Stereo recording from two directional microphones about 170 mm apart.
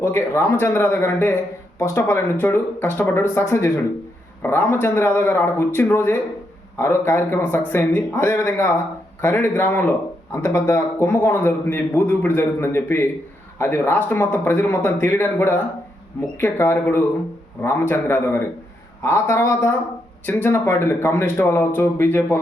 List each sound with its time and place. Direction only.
0.0 s a man's voice: 15° left (ahead or behind)